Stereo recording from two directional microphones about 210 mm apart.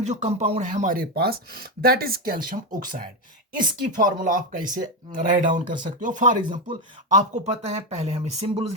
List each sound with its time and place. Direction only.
0.0 s speech: 35° right (ahead or behind)